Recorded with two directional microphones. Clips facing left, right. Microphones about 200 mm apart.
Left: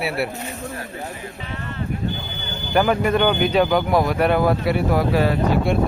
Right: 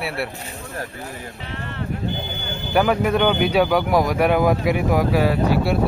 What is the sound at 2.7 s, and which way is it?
Speech, 5° right (ahead or behind).